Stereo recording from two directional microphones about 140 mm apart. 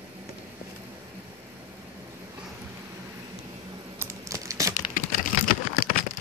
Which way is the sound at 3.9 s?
20° right (ahead or behind).